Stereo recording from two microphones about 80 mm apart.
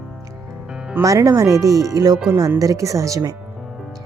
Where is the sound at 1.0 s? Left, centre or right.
Right.